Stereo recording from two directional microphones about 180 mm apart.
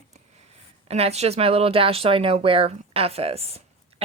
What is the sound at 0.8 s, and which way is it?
A woman's voice, 35° right (ahead or behind).